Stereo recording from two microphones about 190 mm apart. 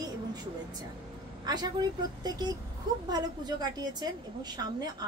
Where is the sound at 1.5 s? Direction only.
20° right (ahead or behind).